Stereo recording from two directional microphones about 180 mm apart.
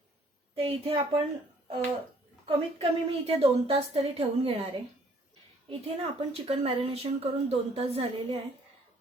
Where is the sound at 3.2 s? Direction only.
30° right (ahead or behind).